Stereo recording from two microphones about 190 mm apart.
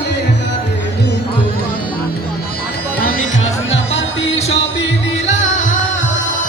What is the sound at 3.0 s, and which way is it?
Music, 50° left (ahead or behind).